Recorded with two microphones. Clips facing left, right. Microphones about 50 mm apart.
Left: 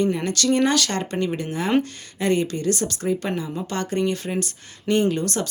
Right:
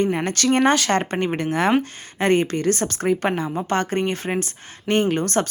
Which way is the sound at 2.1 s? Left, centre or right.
Right.